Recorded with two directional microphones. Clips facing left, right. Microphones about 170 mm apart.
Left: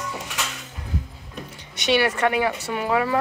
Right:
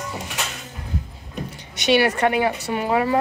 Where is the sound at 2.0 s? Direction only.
35° right (ahead or behind).